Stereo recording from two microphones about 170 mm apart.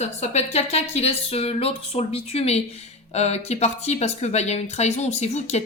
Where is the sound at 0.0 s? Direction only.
40° left (ahead or behind).